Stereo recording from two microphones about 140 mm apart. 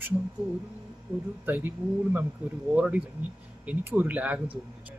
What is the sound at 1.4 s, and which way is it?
Speech, 15° right (ahead or behind).